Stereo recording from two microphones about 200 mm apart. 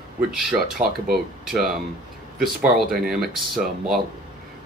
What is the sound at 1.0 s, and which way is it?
Speech, centre (ahead or behind).